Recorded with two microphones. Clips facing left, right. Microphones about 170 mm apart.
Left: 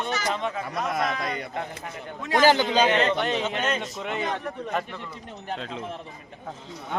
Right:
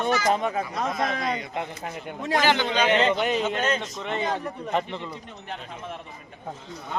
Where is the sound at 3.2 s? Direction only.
Centre (ahead or behind).